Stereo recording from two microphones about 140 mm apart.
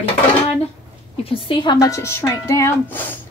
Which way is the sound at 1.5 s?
30° left (ahead or behind).